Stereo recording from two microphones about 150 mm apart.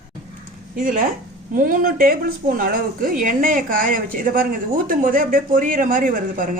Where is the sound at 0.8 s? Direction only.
65° right (ahead or behind).